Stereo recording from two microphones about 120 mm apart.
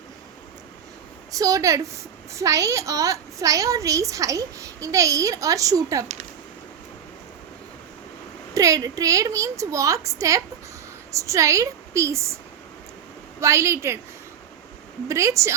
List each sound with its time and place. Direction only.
1.3 s a child's voice: 30° right (ahead or behind)
8.5 s a child's voice: 30° right (ahead or behind)
13.4 s a child's voice: 25° right (ahead or behind)
15.0 s a child's voice: 25° right (ahead or behind)